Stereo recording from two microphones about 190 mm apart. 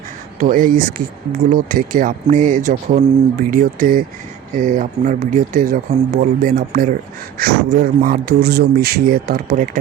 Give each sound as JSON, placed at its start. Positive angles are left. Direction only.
{"t": 0.3, "sound": "speech", "side_deg": -45}